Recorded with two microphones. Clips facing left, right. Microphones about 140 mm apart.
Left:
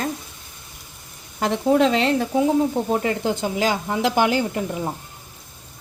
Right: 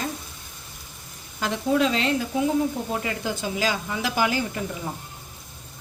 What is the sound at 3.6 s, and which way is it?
Speech, 55° left (ahead or behind).